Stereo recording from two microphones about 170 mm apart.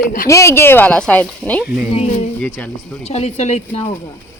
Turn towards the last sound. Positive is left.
turn(degrees=40)  # may be behind; listen again after turning